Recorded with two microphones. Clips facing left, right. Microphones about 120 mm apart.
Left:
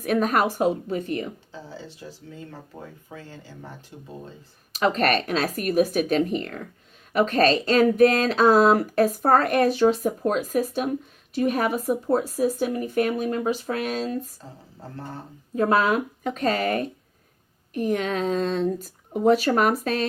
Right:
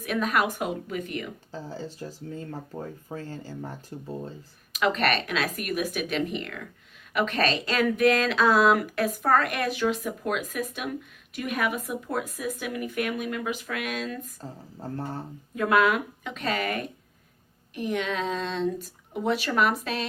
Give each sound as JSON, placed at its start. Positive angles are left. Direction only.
{"t": 0.0, "sound": "speech", "side_deg": 40}
{"t": 1.5, "sound": "speech", "side_deg": -45}
{"t": 4.7, "sound": "speech", "side_deg": 40}
{"t": 15.5, "sound": "speech", "side_deg": 35}